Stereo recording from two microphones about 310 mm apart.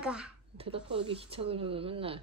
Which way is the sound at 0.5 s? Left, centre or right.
Centre.